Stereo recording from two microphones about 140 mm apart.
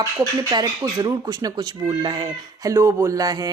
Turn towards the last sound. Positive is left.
turn(degrees=-25)  # may be behind; listen again after turning